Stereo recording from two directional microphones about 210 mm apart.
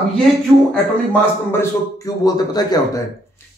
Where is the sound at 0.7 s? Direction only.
10° left (ahead or behind).